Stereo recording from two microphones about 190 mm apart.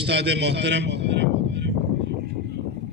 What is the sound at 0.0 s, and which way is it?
A man's voice, 65° right (ahead or behind).